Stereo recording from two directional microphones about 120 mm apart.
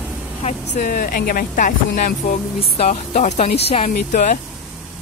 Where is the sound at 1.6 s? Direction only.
90° left.